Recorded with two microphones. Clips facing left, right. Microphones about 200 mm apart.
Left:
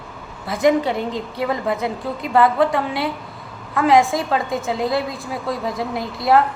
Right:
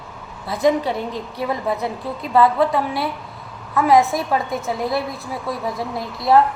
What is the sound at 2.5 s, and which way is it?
Speech, centre (ahead or behind).